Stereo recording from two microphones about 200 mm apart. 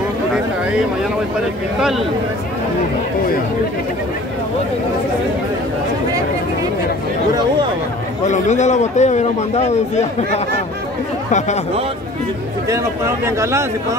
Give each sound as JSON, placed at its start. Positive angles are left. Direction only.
{"t": 1.8, "sound": "speech", "side_deg": 0}
{"t": 8.3, "sound": "a man's voice", "side_deg": 35}
{"t": 12.6, "sound": "speech", "side_deg": -15}